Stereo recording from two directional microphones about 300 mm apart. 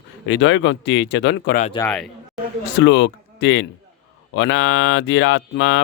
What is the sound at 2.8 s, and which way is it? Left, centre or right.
Speech, left.